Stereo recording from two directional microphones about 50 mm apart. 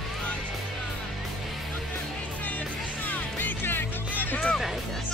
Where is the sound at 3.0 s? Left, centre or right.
Left.